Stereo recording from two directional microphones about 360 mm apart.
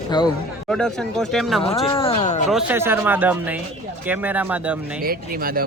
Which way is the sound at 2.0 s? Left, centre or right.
Centre.